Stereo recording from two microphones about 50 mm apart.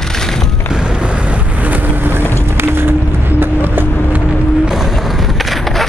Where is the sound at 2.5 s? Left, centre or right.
Right.